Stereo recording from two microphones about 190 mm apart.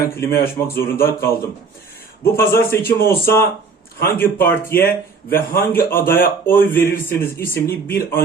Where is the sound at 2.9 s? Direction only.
50° left (ahead or behind).